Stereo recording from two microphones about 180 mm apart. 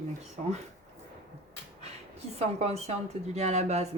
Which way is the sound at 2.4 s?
35° right (ahead or behind).